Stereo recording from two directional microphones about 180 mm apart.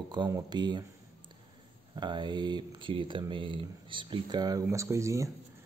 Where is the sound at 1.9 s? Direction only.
25° right (ahead or behind).